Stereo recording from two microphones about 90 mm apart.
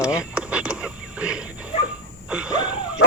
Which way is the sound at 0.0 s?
10° right (ahead or behind).